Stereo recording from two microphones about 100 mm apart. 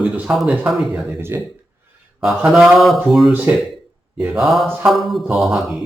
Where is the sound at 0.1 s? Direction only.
10° right (ahead or behind).